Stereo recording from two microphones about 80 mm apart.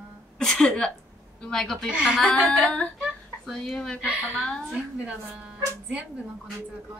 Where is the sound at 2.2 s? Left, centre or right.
Centre.